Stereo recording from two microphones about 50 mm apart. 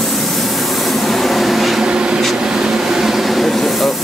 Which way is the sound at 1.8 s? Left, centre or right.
Centre.